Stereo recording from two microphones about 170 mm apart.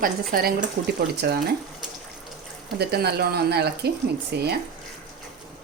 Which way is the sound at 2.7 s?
70° right (ahead or behind).